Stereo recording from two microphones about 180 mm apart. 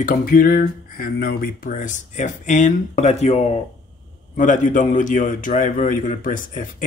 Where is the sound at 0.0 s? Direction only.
50° left (ahead or behind).